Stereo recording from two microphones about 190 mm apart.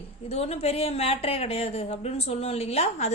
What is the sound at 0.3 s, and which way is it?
A woman's voice, 35° left (ahead or behind).